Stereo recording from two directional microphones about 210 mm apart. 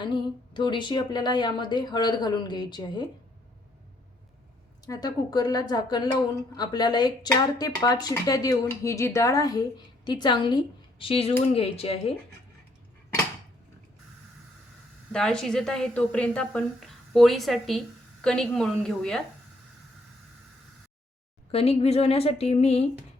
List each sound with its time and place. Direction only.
0.0 s a woman's voice: 20° left (ahead or behind)
4.9 s a woman's voice: 20° left (ahead or behind)
15.1 s a woman's voice: 5° left (ahead or behind)
21.5 s a woman's voice: 30° left (ahead or behind)